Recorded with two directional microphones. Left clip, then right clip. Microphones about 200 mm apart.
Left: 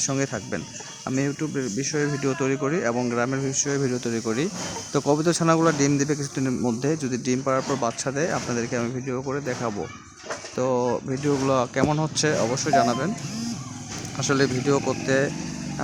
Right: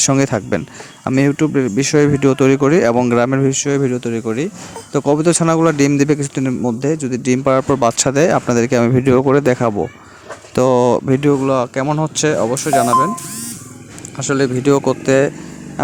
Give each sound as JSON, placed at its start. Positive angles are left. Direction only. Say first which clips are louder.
{"t": 0.0, "sound": "speech", "louder": "right 11 dB", "side_deg": -40}
{"t": 7.4, "sound": "speech", "louder": "right 12 dB", "side_deg": -40}
{"t": 11.4, "sound": "speech", "louder": "right 6 dB", "side_deg": -30}
{"t": 14.2, "sound": "speech", "louder": "right 6 dB", "side_deg": -25}